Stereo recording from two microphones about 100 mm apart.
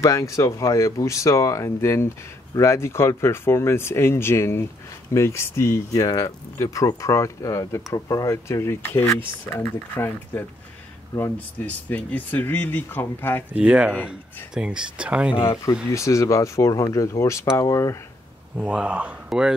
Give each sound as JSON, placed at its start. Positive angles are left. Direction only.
{"t": 0.0, "sound": "speech", "side_deg": 30}
{"t": 13.5, "sound": "speech", "side_deg": -15}
{"t": 15.9, "sound": "speech", "side_deg": 30}
{"t": 18.6, "sound": "speech", "side_deg": -10}